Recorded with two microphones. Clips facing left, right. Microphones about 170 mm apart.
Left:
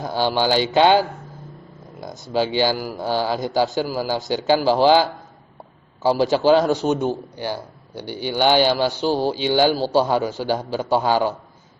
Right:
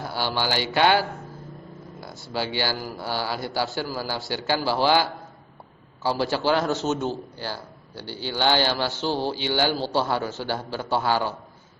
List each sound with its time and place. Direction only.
0.0 s a man's voice: 15° left (ahead or behind)